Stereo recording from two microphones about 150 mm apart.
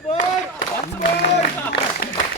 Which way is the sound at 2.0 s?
90° left.